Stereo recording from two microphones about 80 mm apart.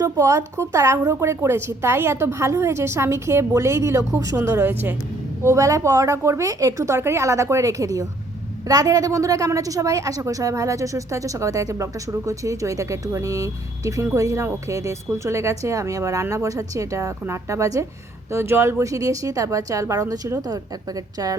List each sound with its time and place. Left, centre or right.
0.0 s a woman's voice: right
4.7 s speech: right
5.4 s a woman's voice: right
18.8 s a woman's voice: right